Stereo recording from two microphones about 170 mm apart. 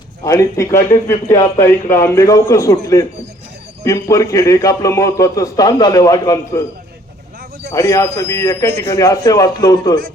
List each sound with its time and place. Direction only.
0.3 s a man's voice: 20° left (ahead or behind)
7.7 s a man's voice: 20° left (ahead or behind)